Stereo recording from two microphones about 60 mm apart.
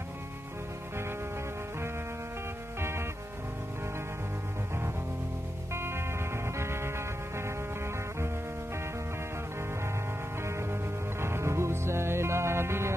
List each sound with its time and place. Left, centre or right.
2.8 s music: right
5.7 s music: right
10.4 s music: right